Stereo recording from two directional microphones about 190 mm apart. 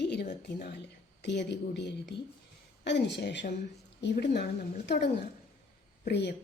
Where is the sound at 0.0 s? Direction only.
60° left (ahead or behind).